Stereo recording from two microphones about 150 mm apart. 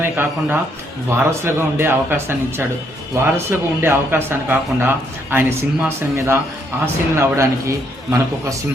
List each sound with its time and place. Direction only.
0.0 s a man's voice: 15° right (ahead or behind)